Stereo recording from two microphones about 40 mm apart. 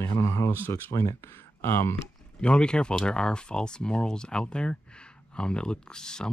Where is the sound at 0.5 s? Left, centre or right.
Left.